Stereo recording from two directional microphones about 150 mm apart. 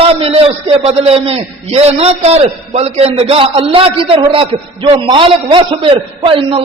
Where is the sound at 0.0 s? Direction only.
40° right (ahead or behind).